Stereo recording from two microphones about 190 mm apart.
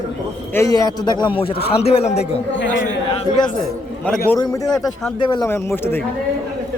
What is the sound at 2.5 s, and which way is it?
Speech, 70° left (ahead or behind).